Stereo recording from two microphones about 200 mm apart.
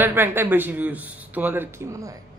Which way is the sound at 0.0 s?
10° right (ahead or behind).